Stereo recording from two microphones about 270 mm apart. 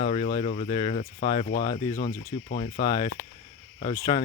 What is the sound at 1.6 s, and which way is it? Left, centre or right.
Speech, centre.